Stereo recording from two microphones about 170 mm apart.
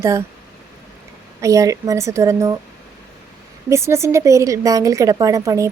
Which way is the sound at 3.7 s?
15° right (ahead or behind).